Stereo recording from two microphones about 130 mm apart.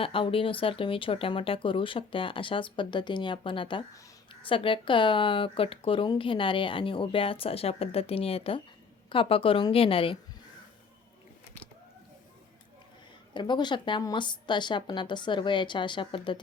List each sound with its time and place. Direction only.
0.0 s speech: 45° left (ahead or behind)
13.3 s speech: 35° left (ahead or behind)